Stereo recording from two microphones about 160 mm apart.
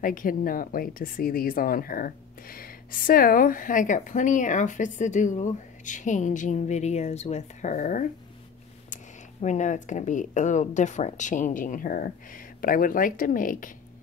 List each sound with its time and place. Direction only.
0.0 s speech: 60° left (ahead or behind)